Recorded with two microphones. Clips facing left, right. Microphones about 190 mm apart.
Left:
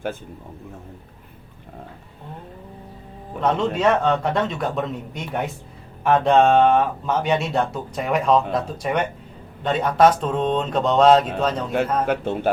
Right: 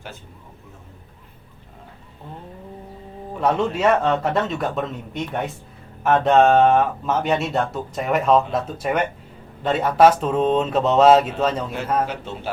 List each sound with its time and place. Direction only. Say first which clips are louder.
3.4 s speech: even; 5° right (ahead or behind)
12.0 s a man's voice: left 7 dB; 55° left (ahead or behind)